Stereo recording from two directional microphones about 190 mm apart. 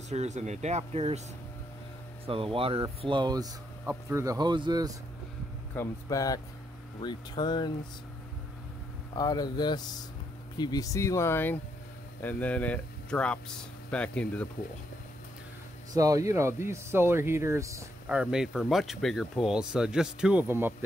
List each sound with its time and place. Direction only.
0.1 s speech: 35° right (ahead or behind)
2.2 s speech: 30° right (ahead or behind)
5.8 s speech: 20° left (ahead or behind)
9.1 s speech: 20° left (ahead or behind)
15.9 s speech: 20° right (ahead or behind)
18.0 s speech: 5° right (ahead or behind)